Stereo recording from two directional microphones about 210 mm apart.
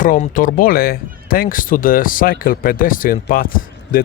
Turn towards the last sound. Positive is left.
turn(degrees=40)  # may be behind; listen again after turning